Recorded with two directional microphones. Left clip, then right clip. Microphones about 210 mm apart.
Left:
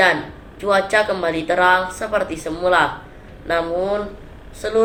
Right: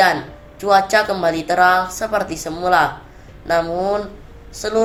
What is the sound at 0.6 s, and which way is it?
Speech, 30° right (ahead or behind).